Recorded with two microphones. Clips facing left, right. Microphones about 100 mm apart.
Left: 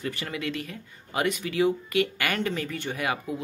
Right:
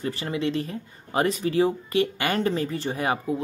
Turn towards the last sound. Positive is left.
turn(degrees=-30)  # may be behind; listen again after turning